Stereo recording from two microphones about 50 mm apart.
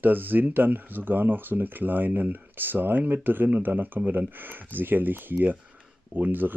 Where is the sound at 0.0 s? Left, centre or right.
Right.